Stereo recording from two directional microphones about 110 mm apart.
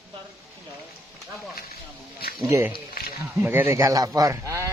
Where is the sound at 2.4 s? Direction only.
25° right (ahead or behind).